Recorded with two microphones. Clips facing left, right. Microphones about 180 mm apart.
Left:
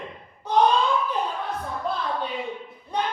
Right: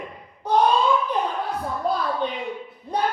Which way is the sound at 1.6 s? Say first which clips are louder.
Right 4 dB; 40° right (ahead or behind).